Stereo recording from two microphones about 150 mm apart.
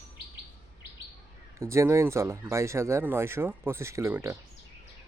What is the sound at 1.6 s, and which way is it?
Speech, 20° right (ahead or behind).